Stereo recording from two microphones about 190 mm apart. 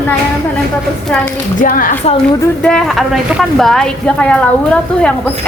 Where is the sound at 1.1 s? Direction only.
5° left (ahead or behind).